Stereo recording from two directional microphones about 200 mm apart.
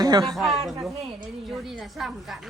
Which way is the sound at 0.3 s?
Centre (ahead or behind).